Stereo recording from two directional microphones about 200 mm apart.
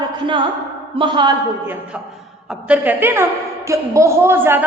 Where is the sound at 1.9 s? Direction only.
5° right (ahead or behind).